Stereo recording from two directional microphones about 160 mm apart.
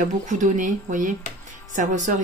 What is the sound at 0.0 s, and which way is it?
Speech, 50° right (ahead or behind).